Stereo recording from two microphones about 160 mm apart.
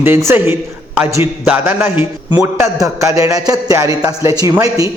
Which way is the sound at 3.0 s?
20° right (ahead or behind).